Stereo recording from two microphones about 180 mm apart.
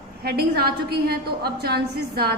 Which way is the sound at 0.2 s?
60° right (ahead or behind).